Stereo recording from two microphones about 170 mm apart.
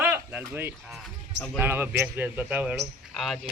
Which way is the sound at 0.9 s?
Centre (ahead or behind).